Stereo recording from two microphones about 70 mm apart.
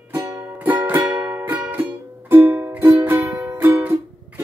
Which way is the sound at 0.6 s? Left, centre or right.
Right.